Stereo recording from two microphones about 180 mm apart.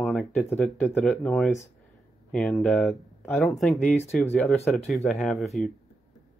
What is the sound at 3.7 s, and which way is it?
Speech, 35° left (ahead or behind).